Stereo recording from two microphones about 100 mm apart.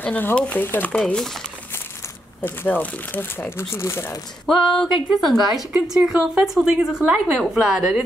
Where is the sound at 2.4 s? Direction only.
15° left (ahead or behind).